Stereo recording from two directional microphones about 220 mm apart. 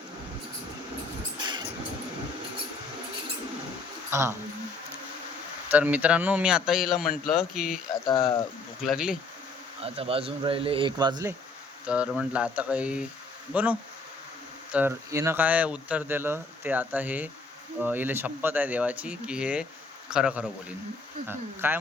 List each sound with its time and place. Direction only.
1.4 s vehicle: 20° right (ahead or behind)
4.1 s speech: 10° right (ahead or behind)
5.7 s a man's voice: 5° right (ahead or behind)
8.8 s a man's voice: 5° right (ahead or behind)
9.8 s speech: 25° right (ahead or behind)
11.9 s a man's voice: 5° right (ahead or behind)